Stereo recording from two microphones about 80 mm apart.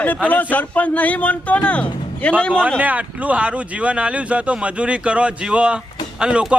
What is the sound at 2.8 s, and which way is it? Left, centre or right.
Speech, centre.